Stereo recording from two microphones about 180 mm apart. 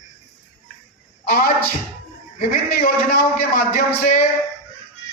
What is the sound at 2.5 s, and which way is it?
A man's voice, 55° left (ahead or behind).